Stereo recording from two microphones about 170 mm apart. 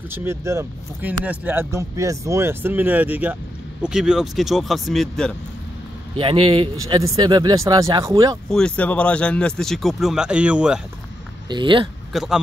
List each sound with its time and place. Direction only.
0.1 s speech: 15° right (ahead or behind); by 5.3 s centre (ahead or behind)
6.1 s speech: 30° right (ahead or behind)
8.5 s speech: 5° left (ahead or behind)
11.4 s speech: 30° right (ahead or behind)
12.1 s speech: centre (ahead or behind)